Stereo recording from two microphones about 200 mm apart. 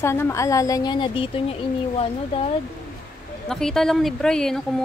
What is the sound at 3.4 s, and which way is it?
Speech, 5° left (ahead or behind).